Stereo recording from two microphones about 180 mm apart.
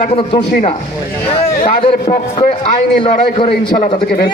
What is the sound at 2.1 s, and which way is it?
A man's voice, 35° left (ahead or behind).